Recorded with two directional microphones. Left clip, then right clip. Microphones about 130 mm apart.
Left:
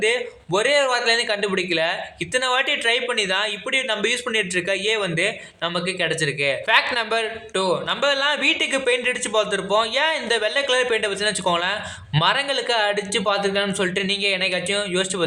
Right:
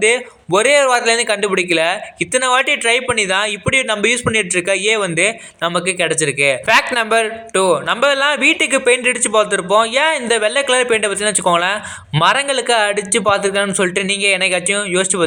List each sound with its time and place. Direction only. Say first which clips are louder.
0.0 s speech: right 6 dB; 35° right (ahead or behind)